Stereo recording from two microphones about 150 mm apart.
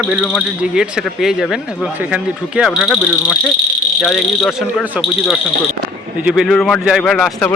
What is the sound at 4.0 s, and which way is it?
Speech, centre (ahead or behind).